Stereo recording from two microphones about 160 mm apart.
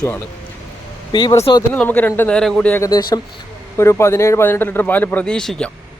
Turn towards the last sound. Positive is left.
turn(degrees=5)  # may be behind; listen again after turning